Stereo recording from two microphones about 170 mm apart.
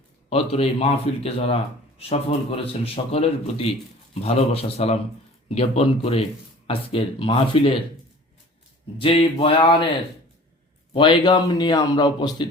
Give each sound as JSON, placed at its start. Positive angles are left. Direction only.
{"t": 0.3, "sound": "a man's voice", "side_deg": 35}
{"t": 9.0, "sound": "a man's voice", "side_deg": 35}
{"t": 10.9, "sound": "speech", "side_deg": 30}